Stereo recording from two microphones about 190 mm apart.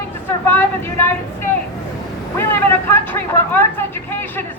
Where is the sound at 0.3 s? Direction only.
10° left (ahead or behind).